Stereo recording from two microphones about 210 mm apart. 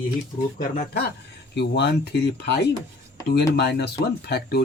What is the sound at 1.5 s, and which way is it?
Speech, 50° left (ahead or behind).